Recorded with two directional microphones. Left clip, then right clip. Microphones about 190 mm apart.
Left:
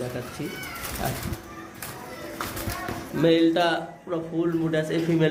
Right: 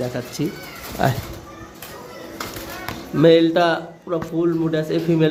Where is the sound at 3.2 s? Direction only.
45° right (ahead or behind).